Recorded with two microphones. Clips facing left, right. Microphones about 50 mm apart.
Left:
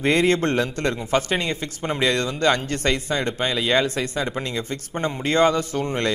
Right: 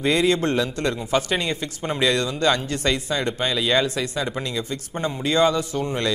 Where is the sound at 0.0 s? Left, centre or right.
Left.